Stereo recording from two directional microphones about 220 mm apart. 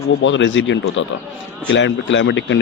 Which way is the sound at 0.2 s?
55° left (ahead or behind).